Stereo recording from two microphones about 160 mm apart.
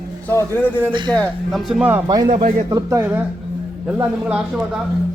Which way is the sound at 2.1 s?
25° right (ahead or behind).